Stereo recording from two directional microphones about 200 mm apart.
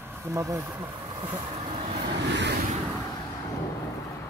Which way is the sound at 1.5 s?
30° right (ahead or behind).